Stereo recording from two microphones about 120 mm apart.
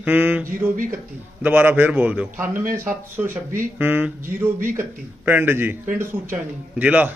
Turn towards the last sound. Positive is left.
turn(degrees=-15)  # may be behind; listen again after turning